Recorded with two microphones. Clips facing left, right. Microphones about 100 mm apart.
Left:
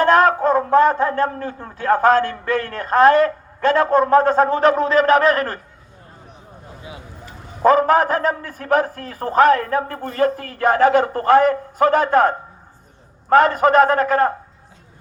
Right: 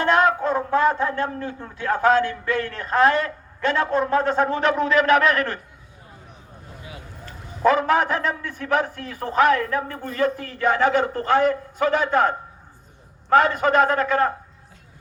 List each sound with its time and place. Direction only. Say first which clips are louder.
0.0 s speech: left 5 dB; 45° left (ahead or behind)
7.6 s a man's voice: left 4 dB; 40° left (ahead or behind)